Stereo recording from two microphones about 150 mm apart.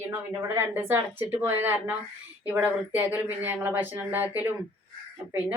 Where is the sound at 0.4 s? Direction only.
15° right (ahead or behind).